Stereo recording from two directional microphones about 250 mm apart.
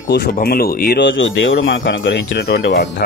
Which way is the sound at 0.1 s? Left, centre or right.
Left.